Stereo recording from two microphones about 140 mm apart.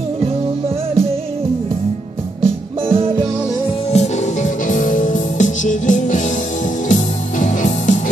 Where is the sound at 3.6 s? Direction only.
50° left (ahead or behind).